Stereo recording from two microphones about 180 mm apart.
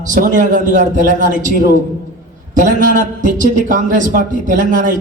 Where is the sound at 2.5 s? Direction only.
45° right (ahead or behind).